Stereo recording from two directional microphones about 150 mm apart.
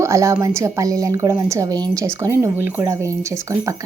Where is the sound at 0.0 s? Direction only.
20° right (ahead or behind).